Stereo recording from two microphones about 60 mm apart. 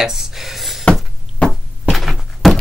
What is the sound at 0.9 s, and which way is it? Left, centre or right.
Thunk, centre.